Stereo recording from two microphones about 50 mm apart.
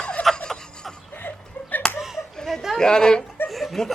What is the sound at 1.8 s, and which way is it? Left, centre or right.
Slap, centre.